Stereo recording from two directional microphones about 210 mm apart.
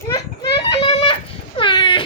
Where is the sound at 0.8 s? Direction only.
25° left (ahead or behind).